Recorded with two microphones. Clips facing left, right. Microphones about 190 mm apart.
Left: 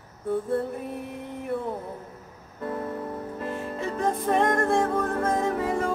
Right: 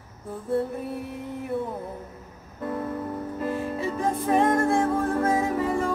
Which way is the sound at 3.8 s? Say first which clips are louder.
Left 3 dB; 5° right (ahead or behind).